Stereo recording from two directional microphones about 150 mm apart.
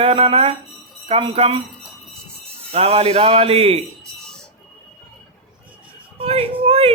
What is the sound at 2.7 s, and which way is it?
Speech, 40° right (ahead or behind).